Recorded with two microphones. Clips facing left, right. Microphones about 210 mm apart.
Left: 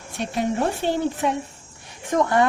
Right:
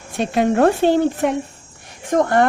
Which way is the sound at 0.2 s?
85° right.